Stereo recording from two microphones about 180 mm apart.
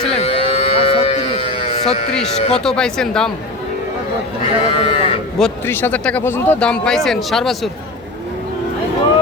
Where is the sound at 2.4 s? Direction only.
35° left (ahead or behind).